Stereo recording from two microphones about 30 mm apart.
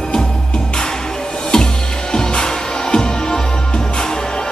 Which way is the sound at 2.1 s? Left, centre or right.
Left.